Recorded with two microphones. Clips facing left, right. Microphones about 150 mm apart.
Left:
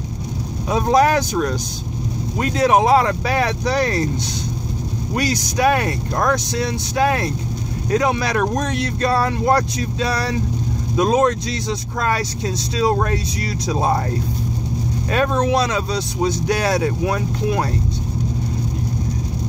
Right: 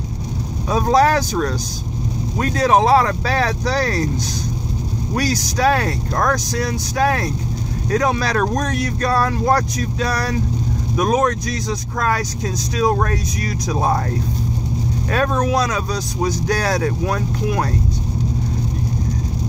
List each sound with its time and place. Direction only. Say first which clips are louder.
0.7 s speech: even; 20° left (ahead or behind)
5.1 s speech: even; 20° left (ahead or behind)
15.0 s speech: left 1 dB; 25° left (ahead or behind)